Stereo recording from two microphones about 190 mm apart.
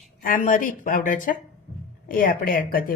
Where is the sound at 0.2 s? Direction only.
45° left (ahead or behind).